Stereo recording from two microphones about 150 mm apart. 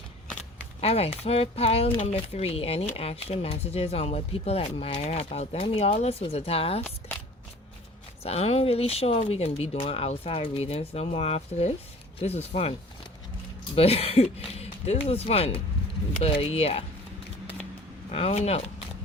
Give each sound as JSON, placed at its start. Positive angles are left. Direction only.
{"t": 0.8, "sound": "speech", "side_deg": 40}
{"t": 8.2, "sound": "speech", "side_deg": 45}
{"t": 13.7, "sound": "speech", "side_deg": 40}
{"t": 18.1, "sound": "speech", "side_deg": 40}